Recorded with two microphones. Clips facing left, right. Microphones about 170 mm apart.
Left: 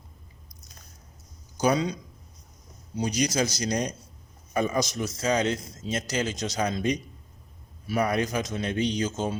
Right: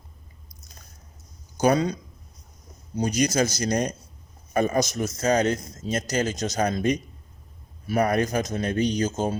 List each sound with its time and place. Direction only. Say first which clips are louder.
1.5 s a man's voice: right 3 dB; 50° right (ahead or behind)